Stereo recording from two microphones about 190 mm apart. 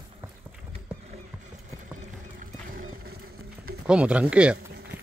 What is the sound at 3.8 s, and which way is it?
Speech, 5° right (ahead or behind).